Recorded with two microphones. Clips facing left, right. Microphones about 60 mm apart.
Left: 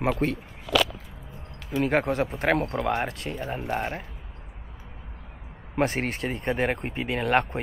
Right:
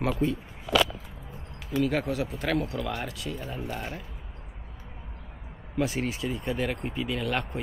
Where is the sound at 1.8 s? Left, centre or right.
Left.